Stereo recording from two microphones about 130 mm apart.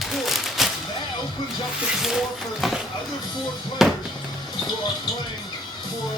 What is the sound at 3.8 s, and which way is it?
Music, centre (ahead or behind).